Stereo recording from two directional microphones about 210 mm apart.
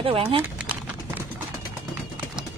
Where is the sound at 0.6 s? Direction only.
5° right (ahead or behind).